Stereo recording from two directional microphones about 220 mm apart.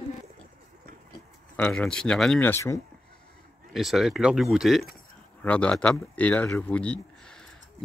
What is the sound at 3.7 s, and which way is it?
Speech, centre (ahead or behind).